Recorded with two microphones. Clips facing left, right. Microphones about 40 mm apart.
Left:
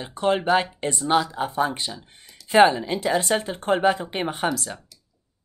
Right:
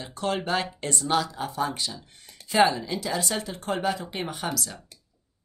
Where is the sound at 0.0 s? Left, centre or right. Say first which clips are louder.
Left 6 dB; left.